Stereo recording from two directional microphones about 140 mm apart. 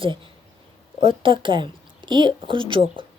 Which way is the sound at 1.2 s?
35° right (ahead or behind).